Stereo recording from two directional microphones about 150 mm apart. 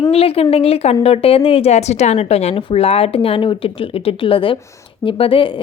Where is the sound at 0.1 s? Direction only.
40° left (ahead or behind).